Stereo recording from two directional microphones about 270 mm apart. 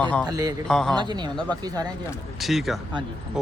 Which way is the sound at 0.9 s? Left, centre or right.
Centre.